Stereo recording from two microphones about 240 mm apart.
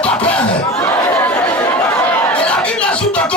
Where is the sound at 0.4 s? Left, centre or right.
Left.